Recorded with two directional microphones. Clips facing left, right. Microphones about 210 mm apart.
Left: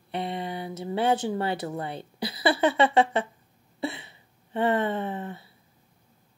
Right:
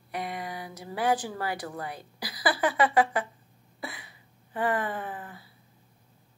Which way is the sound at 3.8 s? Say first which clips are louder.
Left 9 dB; 25° left (ahead or behind).